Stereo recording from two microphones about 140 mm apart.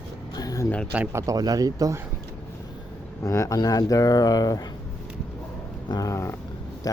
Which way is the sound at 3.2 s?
20° left (ahead or behind).